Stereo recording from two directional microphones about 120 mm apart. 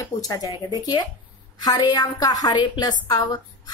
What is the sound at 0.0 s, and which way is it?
A woman's voice, 30° left (ahead or behind).